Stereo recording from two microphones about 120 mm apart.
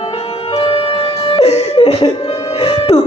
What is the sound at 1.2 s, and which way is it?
Laughter, 50° left (ahead or behind).